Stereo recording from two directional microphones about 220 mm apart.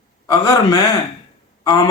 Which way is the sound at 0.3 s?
15° left (ahead or behind).